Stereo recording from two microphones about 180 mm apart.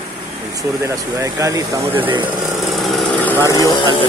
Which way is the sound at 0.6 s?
20° right (ahead or behind).